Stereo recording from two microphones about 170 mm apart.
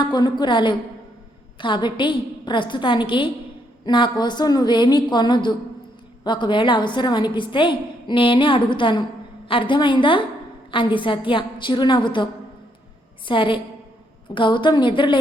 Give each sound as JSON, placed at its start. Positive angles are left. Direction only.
{"t": 0.0, "sound": "a woman's voice", "side_deg": 25}